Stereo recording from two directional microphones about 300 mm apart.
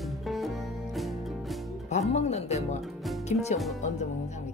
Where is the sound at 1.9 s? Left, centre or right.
Left.